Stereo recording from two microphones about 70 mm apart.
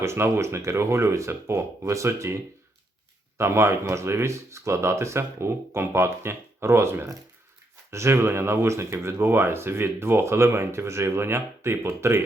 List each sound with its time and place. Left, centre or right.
0.0 s speech: right